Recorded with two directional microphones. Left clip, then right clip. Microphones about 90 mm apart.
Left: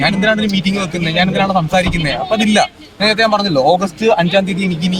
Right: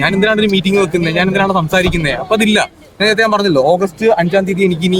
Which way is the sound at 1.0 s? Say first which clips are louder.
Right 1 dB; 5° right (ahead or behind).